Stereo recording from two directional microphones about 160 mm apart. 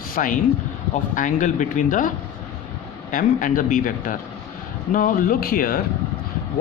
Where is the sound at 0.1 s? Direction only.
60° left (ahead or behind).